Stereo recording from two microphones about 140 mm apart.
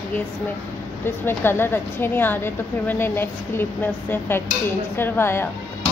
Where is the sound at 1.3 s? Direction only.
15° left (ahead or behind).